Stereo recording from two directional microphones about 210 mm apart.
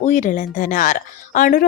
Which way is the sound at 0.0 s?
35° left (ahead or behind).